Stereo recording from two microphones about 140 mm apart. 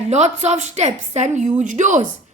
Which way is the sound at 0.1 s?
55° right (ahead or behind).